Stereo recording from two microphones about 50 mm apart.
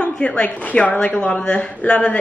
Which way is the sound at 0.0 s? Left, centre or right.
Left.